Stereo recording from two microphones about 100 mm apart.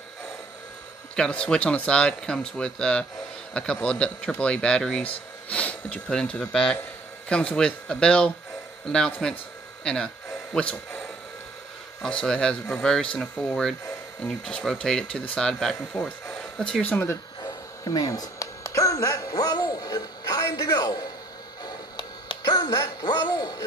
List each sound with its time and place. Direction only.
1.1 s speech: 10° left (ahead or behind)
12.0 s speech: 10° left (ahead or behind)
17.4 s a sound: 40° left (ahead or behind)
21.6 s music: 50° left (ahead or behind)
22.4 s speech: 40° left (ahead or behind)